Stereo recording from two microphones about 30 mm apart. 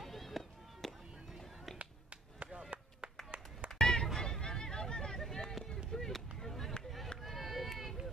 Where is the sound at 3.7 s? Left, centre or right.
Left.